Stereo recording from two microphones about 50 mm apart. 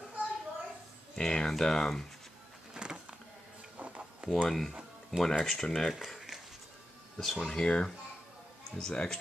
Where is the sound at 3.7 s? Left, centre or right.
Right.